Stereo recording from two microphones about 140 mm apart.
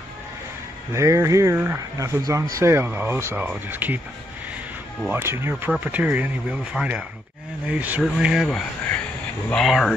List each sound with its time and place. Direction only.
0.9 s speech: 20° right (ahead or behind)
5.1 s speech: 20° right (ahead or behind); by 9.9 s centre (ahead or behind)